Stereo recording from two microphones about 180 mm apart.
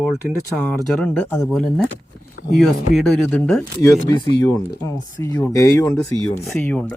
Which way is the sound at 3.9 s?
20° left (ahead or behind).